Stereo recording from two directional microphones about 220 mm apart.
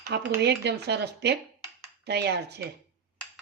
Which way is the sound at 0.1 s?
50° right (ahead or behind).